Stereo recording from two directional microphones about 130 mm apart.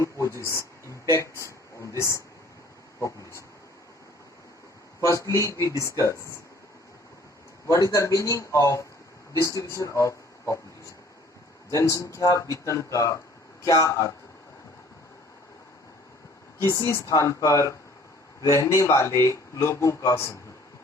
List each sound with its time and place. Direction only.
0.0 s speech: 20° left (ahead or behind)
4.9 s speech: 25° left (ahead or behind)
7.7 s speech: 25° left (ahead or behind)
11.7 s speech: 25° left (ahead or behind)
16.6 s speech: 25° left (ahead or behind)